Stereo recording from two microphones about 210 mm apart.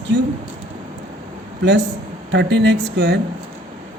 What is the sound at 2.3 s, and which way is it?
Speech, 55° right (ahead or behind).